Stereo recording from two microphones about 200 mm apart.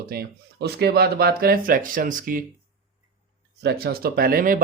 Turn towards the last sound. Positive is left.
turn(degrees=-45)  # may be behind; listen again after turning